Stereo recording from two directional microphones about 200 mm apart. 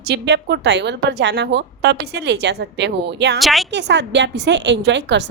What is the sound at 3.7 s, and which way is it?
A woman's voice, 60° right (ahead or behind).